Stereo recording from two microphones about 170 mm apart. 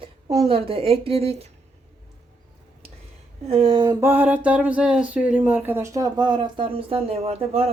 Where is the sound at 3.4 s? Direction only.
35° right (ahead or behind).